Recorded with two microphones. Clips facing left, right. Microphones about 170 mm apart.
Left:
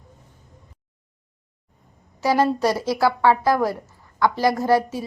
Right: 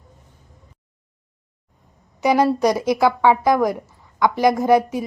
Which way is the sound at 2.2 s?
15° right (ahead or behind).